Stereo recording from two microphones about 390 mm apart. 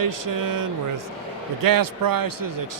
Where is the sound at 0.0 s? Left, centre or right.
Right.